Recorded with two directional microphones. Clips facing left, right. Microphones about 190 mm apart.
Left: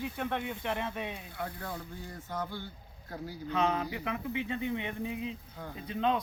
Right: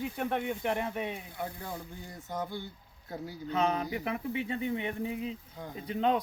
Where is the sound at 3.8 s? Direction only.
30° right (ahead or behind).